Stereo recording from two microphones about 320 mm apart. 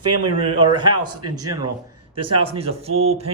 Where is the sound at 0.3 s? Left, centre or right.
Centre.